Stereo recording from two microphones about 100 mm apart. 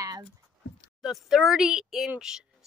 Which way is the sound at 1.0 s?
5° right (ahead or behind).